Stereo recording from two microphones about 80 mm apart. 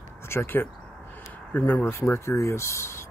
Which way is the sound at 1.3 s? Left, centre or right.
Centre.